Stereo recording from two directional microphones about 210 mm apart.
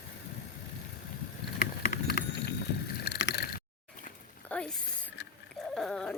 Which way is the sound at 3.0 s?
55° left (ahead or behind).